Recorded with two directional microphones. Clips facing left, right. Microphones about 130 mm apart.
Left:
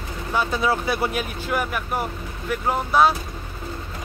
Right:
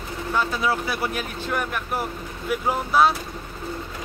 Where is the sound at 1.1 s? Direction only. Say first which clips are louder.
Left 2 dB; 5° left (ahead or behind).